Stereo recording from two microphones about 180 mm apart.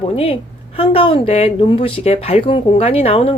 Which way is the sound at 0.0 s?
30° left (ahead or behind).